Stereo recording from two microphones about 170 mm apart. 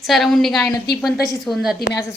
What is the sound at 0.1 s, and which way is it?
A woman's voice, centre (ahead or behind).